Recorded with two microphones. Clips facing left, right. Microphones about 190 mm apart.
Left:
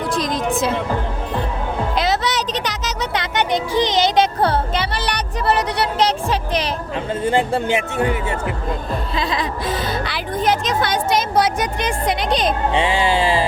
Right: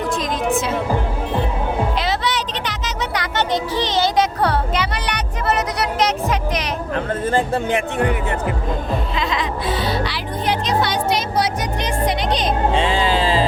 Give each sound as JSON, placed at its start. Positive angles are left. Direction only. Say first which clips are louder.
{"t": 2.0, "sound": "music", "louder": "left 2 dB", "side_deg": 40}
{"t": 3.2, "sound": "music", "louder": "left 1 dB", "side_deg": 15}
{"t": 6.9, "sound": "speech", "louder": "left 1 dB", "side_deg": 15}
{"t": 9.1, "sound": "a sound", "louder": "even", "side_deg": 35}
{"t": 12.7, "sound": "music", "louder": "even", "side_deg": 15}